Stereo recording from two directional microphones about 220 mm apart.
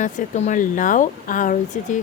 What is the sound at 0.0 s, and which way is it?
A woman's voice, 35° left (ahead or behind).